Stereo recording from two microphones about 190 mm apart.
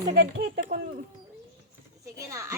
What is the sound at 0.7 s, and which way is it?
Speech, 40° right (ahead or behind).